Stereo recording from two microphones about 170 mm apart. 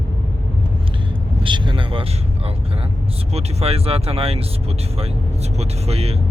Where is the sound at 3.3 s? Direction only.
40° right (ahead or behind).